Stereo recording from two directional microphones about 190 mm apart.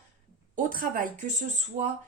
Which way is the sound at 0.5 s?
45° right (ahead or behind).